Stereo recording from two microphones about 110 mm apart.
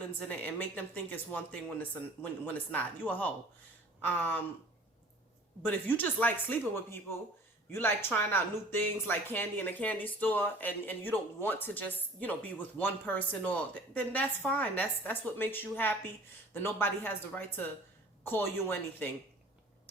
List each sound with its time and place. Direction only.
0.2 s speech: 15° left (ahead or behind)
5.6 s speech: 15° left (ahead or behind)